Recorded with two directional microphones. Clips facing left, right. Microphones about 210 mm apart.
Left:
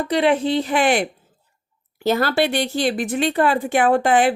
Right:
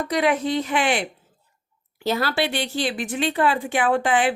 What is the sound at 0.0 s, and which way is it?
Speech, 30° left (ahead or behind).